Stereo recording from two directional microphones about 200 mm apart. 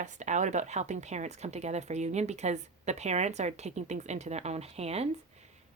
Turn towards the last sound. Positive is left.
turn(degrees=-30)  # may be behind; listen again after turning